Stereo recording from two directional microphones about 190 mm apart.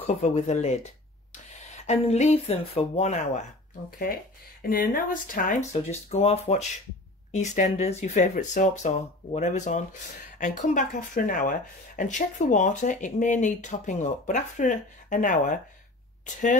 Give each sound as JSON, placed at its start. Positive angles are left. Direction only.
{"t": 0.0, "sound": "speech", "side_deg": 35}
{"t": 4.0, "sound": "speech", "side_deg": 50}